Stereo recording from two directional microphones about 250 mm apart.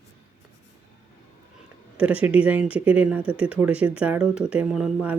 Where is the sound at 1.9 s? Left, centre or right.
Centre.